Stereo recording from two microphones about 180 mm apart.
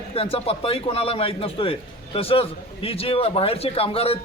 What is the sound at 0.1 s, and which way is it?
A man's voice, 30° left (ahead or behind).